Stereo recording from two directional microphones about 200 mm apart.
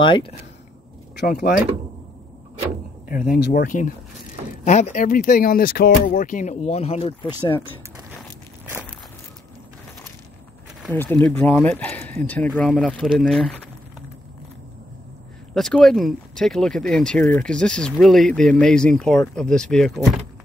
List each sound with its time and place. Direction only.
0.0 s speech: 25° left (ahead or behind)
1.1 s speech: 50° left (ahead or behind)
3.1 s speech: 45° left (ahead or behind)
3.6 s speech: 40° left (ahead or behind); by 7.3 s 25° left (ahead or behind)
10.9 s speech: 10° left (ahead or behind)
15.5 s speech: centre (ahead or behind)